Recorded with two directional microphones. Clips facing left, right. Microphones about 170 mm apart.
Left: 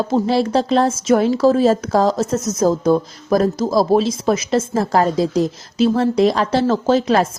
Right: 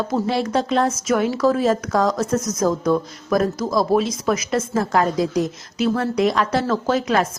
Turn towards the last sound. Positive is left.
turn(degrees=30)  # may be behind; listen again after turning